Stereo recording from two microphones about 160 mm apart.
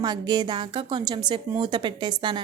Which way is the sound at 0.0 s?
25° right (ahead or behind).